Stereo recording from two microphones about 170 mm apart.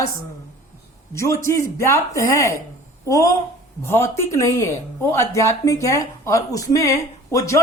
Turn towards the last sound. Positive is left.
turn(degrees=15)  # may be behind; listen again after turning